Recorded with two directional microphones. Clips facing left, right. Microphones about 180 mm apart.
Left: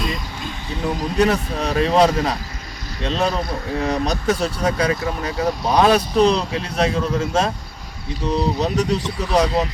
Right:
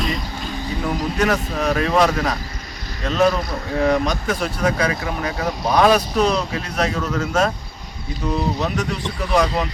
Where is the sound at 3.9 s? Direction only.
40° left (ahead or behind).